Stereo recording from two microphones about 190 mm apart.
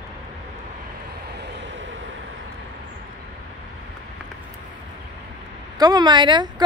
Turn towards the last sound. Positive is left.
turn(degrees=-25)  # may be behind; listen again after turning